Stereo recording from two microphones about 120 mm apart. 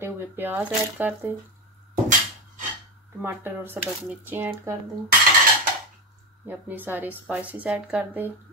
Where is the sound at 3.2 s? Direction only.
20° right (ahead or behind).